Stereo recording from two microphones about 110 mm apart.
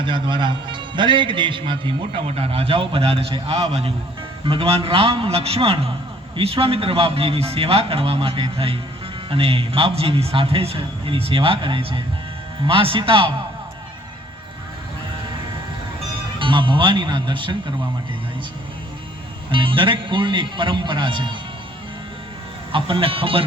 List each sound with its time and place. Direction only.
0.0 s a man's voice: 45° right (ahead or behind)
2.2 s a man's voice: 70° right (ahead or behind)
4.4 s a man's voice: 55° right (ahead or behind)
16.4 s a man's voice: 50° right (ahead or behind)
19.5 s a man's voice: 50° right (ahead or behind)
22.7 s a man's voice: 55° right (ahead or behind)